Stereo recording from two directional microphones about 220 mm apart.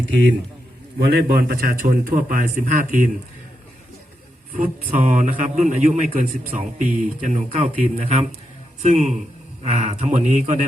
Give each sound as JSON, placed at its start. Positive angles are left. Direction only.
{"t": 0.9, "sound": "a man's voice", "side_deg": -45}
{"t": 4.5, "sound": "a man's voice", "side_deg": -40}